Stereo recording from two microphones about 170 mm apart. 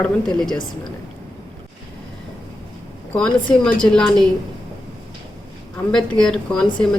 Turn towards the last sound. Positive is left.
turn(degrees=5)  # may be behind; listen again after turning